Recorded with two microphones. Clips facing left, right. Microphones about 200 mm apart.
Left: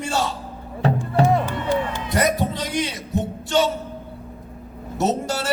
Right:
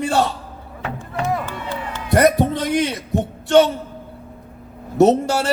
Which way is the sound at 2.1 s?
60° right (ahead or behind).